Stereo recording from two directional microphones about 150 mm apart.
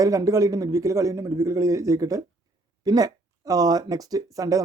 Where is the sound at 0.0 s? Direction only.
20° right (ahead or behind).